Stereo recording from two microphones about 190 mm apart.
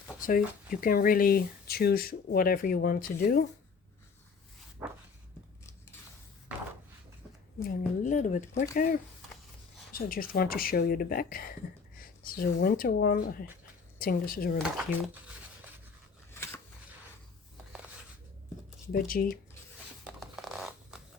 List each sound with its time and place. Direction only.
0.2 s speech: 45° left (ahead or behind)
4.8 s a sound: 10° right (ahead or behind)
7.6 s speech: 45° left (ahead or behind)
11.9 s a sound: 50° left (ahead or behind)
12.6 s speech: 50° left (ahead or behind)
14.6 s speech: centre (ahead or behind)
16.3 s scissors: 15° left (ahead or behind)
18.9 s speech: 50° left (ahead or behind)
20.1 s zipper: centre (ahead or behind)